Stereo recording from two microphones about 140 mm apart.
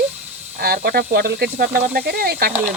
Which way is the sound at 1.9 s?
90° right.